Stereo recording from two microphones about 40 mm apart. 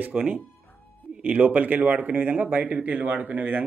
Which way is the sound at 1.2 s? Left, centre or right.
Right.